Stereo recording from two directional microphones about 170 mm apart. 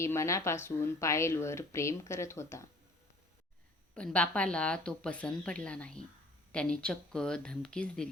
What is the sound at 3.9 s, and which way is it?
Speech, 5° left (ahead or behind).